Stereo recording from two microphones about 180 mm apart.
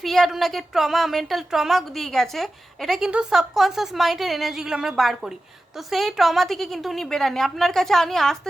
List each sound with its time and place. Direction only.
0.0 s speech: centre (ahead or behind)